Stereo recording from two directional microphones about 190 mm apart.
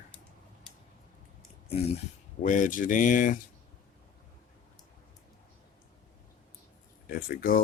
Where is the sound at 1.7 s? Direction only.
30° left (ahead or behind).